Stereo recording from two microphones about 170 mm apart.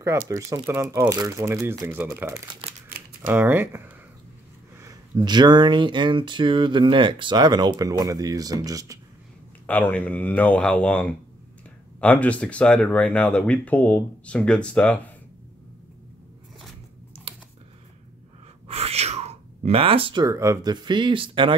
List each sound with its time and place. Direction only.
0.3 s speech: 20° right (ahead or behind)
9.7 s speech: 10° left (ahead or behind)
18.7 s sneeze: 35° right (ahead or behind)
20.2 s speech: 20° right (ahead or behind)